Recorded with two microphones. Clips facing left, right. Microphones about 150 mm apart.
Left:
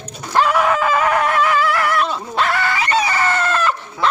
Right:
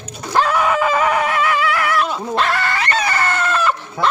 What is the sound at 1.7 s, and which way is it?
Dog, centre (ahead or behind).